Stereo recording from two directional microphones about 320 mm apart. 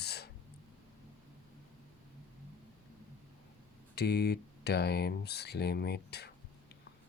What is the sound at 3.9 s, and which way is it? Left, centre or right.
Speech, left.